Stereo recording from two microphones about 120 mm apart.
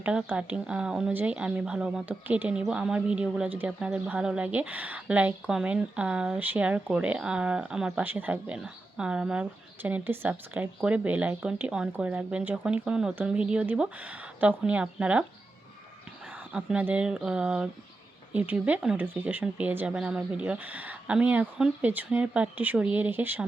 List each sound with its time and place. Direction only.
0.0 s speech: 10° right (ahead or behind)
16.5 s speech: 10° right (ahead or behind)